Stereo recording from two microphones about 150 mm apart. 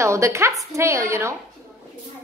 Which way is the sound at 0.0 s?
20° right (ahead or behind).